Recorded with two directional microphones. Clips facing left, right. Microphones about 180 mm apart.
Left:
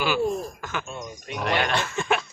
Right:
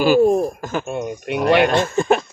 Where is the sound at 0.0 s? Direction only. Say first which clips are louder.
Right 11 dB; 45° right (ahead or behind).